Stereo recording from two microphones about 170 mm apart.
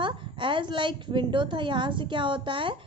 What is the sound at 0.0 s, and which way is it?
A woman's voice, 30° right (ahead or behind).